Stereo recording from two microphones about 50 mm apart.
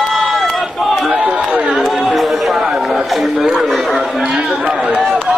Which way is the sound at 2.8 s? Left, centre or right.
Centre.